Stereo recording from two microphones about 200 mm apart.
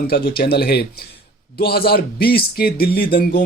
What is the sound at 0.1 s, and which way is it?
Speech, 50° left (ahead or behind).